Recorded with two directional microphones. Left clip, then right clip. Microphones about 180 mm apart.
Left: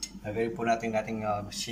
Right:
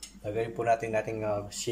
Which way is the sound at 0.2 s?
35° right (ahead or behind).